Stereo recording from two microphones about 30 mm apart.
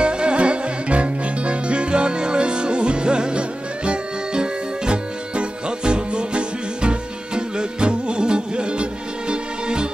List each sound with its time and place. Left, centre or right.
0.0 s music: right